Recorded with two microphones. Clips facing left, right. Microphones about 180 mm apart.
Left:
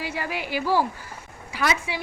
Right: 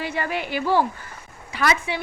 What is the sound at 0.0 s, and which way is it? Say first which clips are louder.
A woman's voice: right 3 dB; 5° left (ahead or behind).